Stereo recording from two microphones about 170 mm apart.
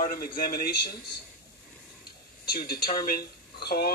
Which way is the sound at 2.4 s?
65° left (ahead or behind).